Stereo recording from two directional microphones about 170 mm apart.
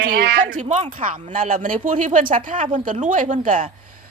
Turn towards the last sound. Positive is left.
turn(degrees=-50)  # may be behind; listen again after turning